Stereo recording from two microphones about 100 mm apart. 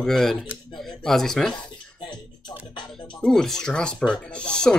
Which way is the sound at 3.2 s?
5° left (ahead or behind).